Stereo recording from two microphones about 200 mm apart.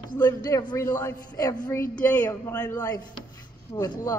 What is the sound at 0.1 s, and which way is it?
A man's voice, 20° left (ahead or behind).